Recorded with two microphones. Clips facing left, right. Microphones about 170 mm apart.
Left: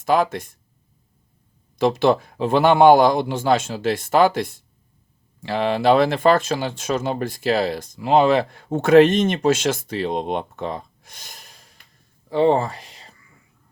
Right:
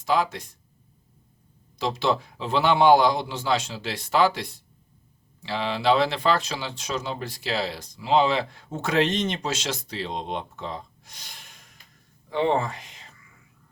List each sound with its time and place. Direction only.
0.0 s speech: 50° left (ahead or behind)
1.8 s speech: 55° left (ahead or behind); by 13.1 s 35° left (ahead or behind)